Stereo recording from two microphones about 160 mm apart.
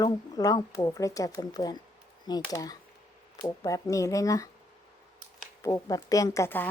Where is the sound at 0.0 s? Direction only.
25° left (ahead or behind).